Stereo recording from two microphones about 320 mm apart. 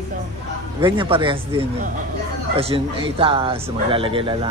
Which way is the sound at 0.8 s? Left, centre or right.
Centre.